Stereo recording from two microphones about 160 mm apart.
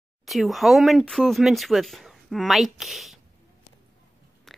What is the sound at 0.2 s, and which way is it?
Speech, centre (ahead or behind).